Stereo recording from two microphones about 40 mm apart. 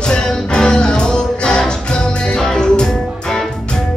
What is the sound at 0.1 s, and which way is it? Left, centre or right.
Music, centre.